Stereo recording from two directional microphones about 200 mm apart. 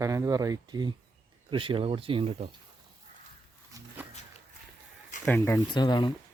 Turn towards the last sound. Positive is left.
turn(degrees=20)  # may be behind; listen again after turning